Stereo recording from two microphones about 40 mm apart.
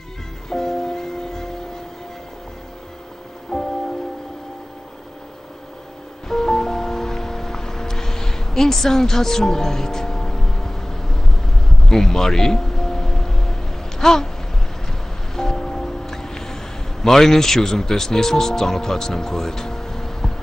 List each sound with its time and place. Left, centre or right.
0.5 s music: centre
3.5 s music: centre
6.2 s music: centre
15.3 s music: centre